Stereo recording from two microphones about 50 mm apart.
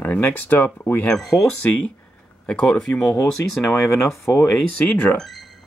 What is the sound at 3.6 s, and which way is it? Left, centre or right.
Speech, left.